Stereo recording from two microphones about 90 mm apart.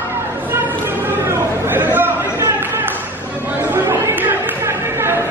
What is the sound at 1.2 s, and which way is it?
Chatter, 25° right (ahead or behind).